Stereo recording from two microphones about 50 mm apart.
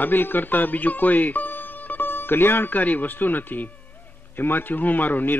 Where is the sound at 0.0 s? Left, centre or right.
Left.